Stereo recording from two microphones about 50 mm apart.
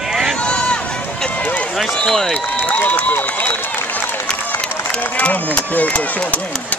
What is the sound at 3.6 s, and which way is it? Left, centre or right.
Run, left.